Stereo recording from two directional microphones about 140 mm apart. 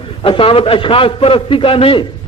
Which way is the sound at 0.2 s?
40° left (ahead or behind).